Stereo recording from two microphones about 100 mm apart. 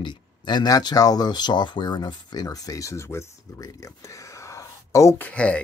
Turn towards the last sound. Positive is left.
turn(degrees=10)  # may be behind; listen again after turning